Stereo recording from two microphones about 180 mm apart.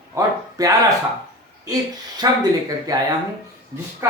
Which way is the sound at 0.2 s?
20° right (ahead or behind).